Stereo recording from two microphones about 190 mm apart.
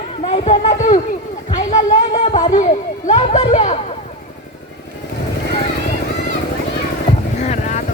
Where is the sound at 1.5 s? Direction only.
40° left (ahead or behind).